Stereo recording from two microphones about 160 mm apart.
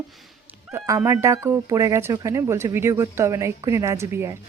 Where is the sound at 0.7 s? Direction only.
15° right (ahead or behind).